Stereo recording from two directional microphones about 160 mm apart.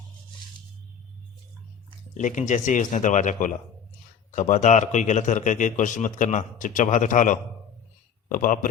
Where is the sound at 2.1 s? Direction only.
50° left (ahead or behind).